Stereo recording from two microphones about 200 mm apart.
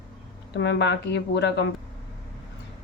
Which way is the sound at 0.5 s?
60° left (ahead or behind).